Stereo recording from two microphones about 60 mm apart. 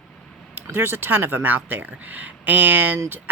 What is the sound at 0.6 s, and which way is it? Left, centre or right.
Speech, right.